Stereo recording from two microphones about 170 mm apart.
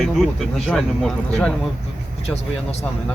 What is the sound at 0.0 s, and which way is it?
Speech, centre (ahead or behind).